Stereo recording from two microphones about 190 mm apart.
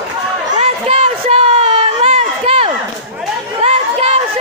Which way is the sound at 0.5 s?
35° right (ahead or behind).